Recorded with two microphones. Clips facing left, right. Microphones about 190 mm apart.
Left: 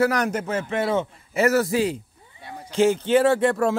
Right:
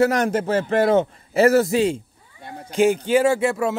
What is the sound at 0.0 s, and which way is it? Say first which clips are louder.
Speech: right 3 dB; 25° right (ahead or behind).